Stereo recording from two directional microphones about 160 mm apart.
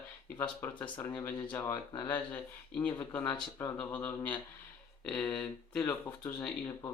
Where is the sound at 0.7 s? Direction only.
30° left (ahead or behind).